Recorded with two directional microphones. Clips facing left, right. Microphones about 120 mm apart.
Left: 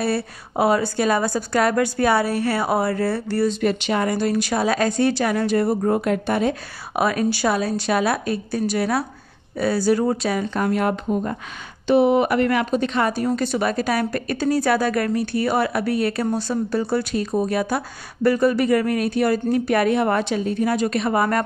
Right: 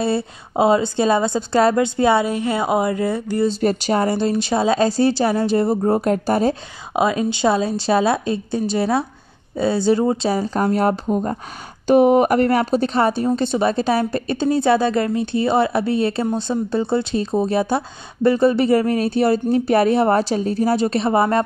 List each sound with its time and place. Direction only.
0.0 s a woman's voice: 25° right (ahead or behind)
3.4 s speech: 35° right (ahead or behind)
7.0 s a woman's voice: 20° right (ahead or behind)